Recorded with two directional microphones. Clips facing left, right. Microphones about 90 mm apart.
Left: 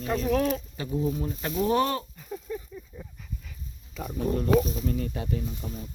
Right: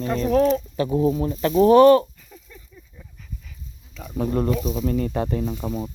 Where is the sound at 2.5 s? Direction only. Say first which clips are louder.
Left 16 dB; 30° left (ahead or behind).